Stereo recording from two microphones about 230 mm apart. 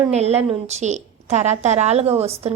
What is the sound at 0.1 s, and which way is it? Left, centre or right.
A woman's voice, right.